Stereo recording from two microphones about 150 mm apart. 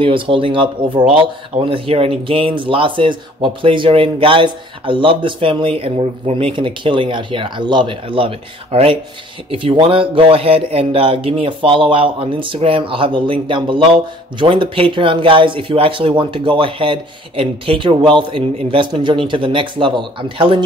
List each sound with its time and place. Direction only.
0.0 s speech: 35° right (ahead or behind)